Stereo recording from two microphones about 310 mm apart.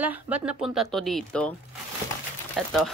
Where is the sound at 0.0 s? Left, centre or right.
Centre.